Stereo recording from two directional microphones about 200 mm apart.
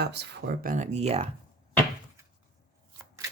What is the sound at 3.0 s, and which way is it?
Shuffling cards, 15° right (ahead or behind).